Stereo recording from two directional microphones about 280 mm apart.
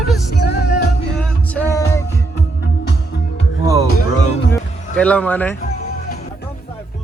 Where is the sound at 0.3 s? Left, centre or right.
Left.